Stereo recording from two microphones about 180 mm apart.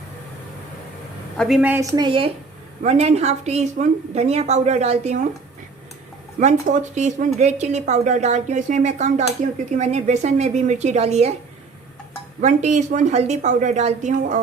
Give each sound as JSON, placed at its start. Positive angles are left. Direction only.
{"t": 1.4, "sound": "a woman's voice", "side_deg": 0}
{"t": 2.0, "sound": "a woman's voice", "side_deg": -30}
{"t": 6.4, "sound": "a woman's voice", "side_deg": -40}
{"t": 12.4, "sound": "a woman's voice", "side_deg": -40}